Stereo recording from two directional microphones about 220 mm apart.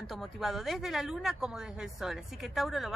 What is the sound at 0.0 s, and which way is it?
A woman's voice, centre (ahead or behind).